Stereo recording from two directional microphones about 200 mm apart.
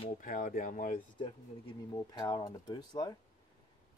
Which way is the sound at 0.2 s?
45° left (ahead or behind).